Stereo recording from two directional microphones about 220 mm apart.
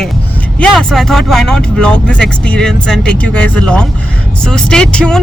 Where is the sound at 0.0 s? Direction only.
5° left (ahead or behind).